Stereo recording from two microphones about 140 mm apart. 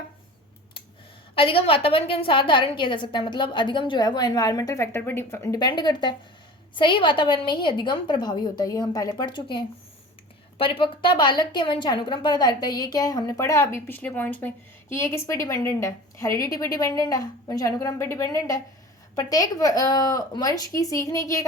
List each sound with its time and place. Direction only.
1.4 s a woman's voice: 40° left (ahead or behind); by 21.4 s 25° left (ahead or behind)